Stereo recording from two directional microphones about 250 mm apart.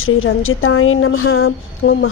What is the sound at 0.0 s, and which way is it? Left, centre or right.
A woman's voice, left.